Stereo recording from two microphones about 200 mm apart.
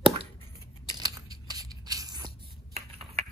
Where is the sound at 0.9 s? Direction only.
20° right (ahead or behind).